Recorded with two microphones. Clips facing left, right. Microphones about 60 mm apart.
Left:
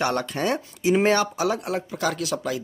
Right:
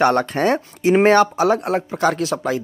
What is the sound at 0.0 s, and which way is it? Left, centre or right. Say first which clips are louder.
Speech: right 8 dB; right.